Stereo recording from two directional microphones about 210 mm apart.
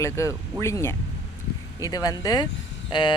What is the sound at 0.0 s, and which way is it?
Speech, 15° left (ahead or behind).